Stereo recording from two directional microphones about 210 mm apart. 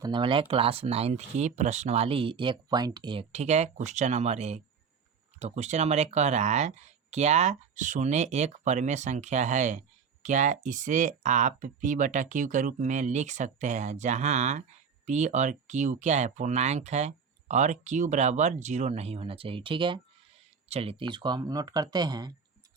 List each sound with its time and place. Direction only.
0.0 s speech: 20° right (ahead or behind)